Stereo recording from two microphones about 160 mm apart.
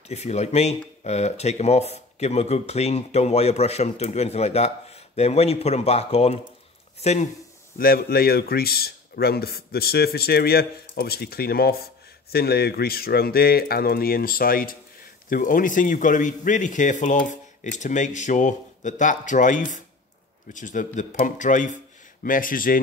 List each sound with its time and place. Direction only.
0.1 s speech: 45° left (ahead or behind)
7.7 s speech: 65° left (ahead or behind)